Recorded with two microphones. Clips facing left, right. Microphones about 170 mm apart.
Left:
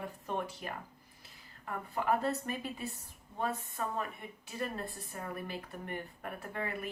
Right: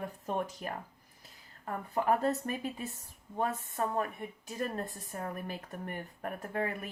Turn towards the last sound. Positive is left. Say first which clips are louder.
# right 5 dB
turn(degrees=-45)  # may be behind; listen again after turning